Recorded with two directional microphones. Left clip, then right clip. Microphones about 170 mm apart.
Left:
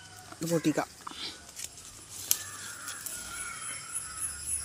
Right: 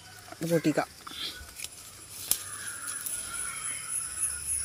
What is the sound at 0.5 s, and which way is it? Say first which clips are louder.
Speech: right 2 dB; centre (ahead or behind).